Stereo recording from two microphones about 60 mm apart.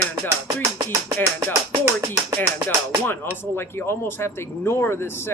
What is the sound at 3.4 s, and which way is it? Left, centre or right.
Speech, left.